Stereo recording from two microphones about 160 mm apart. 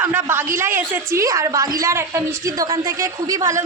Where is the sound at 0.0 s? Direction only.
15° right (ahead or behind).